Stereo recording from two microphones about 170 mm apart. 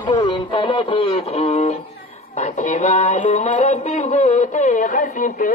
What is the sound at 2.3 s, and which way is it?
Music, 45° left (ahead or behind).